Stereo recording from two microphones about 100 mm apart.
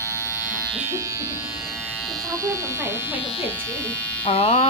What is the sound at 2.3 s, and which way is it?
Electric shaver, 30° right (ahead or behind).